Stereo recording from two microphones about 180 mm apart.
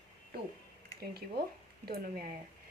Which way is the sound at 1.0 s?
60° right (ahead or behind).